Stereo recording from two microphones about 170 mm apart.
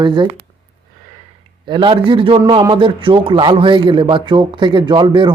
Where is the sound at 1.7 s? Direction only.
30° right (ahead or behind).